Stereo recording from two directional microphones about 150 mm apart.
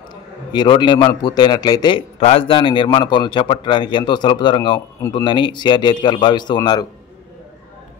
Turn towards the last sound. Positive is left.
turn(degrees=30)  # may be behind; listen again after turning